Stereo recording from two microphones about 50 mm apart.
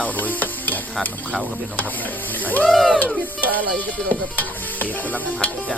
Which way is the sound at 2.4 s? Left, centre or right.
Left.